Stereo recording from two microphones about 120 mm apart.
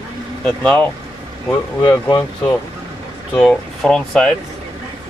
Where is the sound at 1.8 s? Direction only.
35° left (ahead or behind).